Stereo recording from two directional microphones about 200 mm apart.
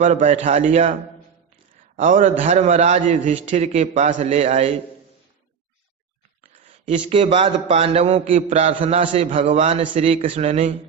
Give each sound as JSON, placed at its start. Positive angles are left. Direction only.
{"t": 0.0, "sound": "a man's voice", "side_deg": -35}
{"t": 1.7, "sound": "a sound", "side_deg": -40}
{"t": 2.4, "sound": "a man's voice", "side_deg": -35}
{"t": 6.7, "sound": "a man's voice", "side_deg": -25}